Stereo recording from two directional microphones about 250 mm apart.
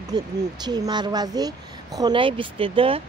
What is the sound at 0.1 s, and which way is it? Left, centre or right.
Speech, centre.